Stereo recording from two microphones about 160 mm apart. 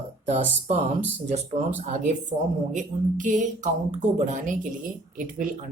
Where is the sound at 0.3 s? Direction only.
45° right (ahead or behind).